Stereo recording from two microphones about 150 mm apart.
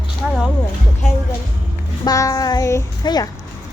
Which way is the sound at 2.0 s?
20° left (ahead or behind).